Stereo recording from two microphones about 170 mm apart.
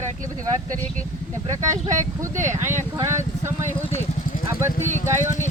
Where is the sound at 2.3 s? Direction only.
45° right (ahead or behind).